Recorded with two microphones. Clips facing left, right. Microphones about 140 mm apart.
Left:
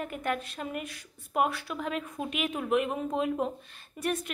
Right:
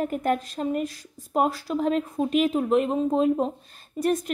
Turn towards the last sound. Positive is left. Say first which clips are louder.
# right 7 dB
turn(degrees=-40)  # may be behind; listen again after turning